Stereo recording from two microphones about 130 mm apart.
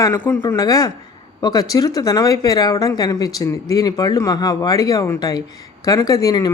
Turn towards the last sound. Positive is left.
turn(degrees=30)  # may be behind; listen again after turning